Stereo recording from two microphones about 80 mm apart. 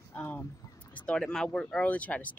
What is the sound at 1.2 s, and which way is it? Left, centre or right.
Speech, centre.